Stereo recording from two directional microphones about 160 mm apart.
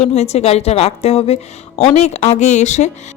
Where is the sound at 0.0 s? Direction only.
40° left (ahead or behind).